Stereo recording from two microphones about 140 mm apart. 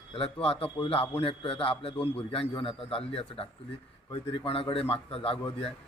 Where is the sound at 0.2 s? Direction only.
40° left (ahead or behind).